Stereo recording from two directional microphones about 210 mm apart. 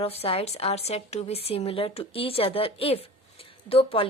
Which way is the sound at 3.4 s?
25° left (ahead or behind).